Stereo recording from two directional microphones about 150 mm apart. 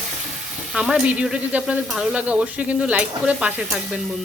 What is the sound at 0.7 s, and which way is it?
Speech, 5° right (ahead or behind).